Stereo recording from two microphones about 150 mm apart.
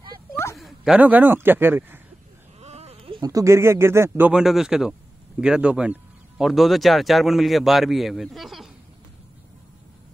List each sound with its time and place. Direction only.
0.6 s speech: centre (ahead or behind)
2.6 s a sound: 45° right (ahead or behind)
3.2 s speech: 20° right (ahead or behind); by 8.7 s centre (ahead or behind)